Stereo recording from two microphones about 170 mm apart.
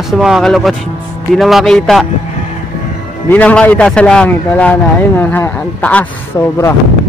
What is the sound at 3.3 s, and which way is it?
A man's voice, 10° left (ahead or behind).